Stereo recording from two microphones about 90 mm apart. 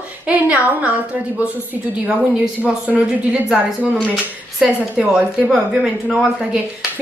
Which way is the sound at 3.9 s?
Centre (ahead or behind).